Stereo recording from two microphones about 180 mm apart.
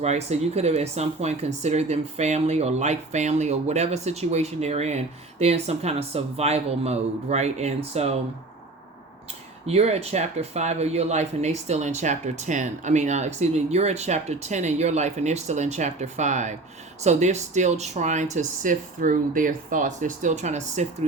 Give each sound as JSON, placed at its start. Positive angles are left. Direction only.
{"t": 0.0, "sound": "speech", "side_deg": -35}
{"t": 9.6, "sound": "speech", "side_deg": -35}